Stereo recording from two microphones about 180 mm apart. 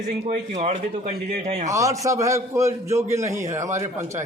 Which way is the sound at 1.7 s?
15° right (ahead or behind).